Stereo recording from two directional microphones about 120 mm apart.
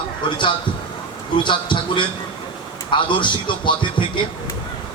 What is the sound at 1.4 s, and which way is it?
Speech, 40° left (ahead or behind).